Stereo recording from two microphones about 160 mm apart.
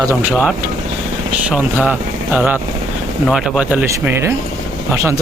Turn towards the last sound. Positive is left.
turn(degrees=-15)  # may be behind; listen again after turning